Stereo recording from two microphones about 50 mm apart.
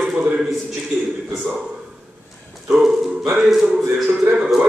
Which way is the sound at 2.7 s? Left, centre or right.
Centre.